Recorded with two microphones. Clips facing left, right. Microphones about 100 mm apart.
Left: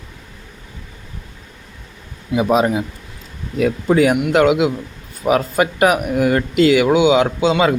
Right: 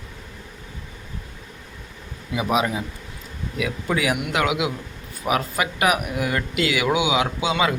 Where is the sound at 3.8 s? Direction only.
35° left (ahead or behind).